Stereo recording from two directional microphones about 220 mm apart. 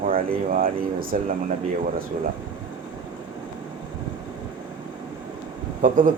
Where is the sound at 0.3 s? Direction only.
40° right (ahead or behind).